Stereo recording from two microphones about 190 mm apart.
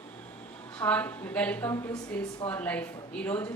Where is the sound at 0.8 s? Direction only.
10° left (ahead or behind).